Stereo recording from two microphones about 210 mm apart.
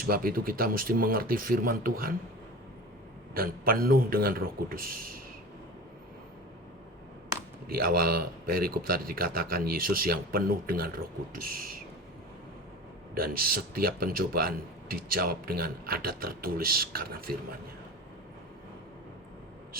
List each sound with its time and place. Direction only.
0.0 s a man's voice: 45° right (ahead or behind)
3.3 s a man's voice: 45° right (ahead or behind)
7.7 s a man's voice: 45° right (ahead or behind)
13.1 s a man's voice: 45° right (ahead or behind)